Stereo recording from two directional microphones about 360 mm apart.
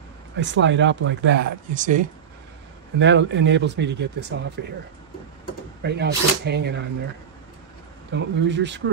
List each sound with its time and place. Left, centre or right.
0.4 s speech: right
5.8 s speech: right
8.1 s speech: right